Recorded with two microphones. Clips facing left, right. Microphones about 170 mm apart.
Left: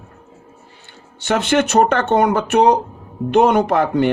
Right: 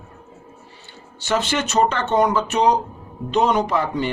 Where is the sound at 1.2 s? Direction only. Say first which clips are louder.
Left 5 dB; 60° left (ahead or behind).